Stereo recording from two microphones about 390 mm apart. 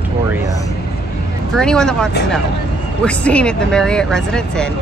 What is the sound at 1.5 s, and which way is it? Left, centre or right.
Speech, centre.